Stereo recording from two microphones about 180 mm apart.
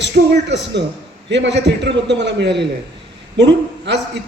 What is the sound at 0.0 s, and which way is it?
A man's voice, 75° right (ahead or behind).